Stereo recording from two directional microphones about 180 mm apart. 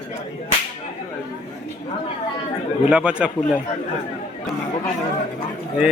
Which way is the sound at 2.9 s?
5° right (ahead or behind).